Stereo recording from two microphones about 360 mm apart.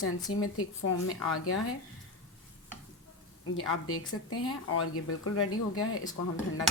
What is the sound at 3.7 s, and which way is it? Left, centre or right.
Speech, left.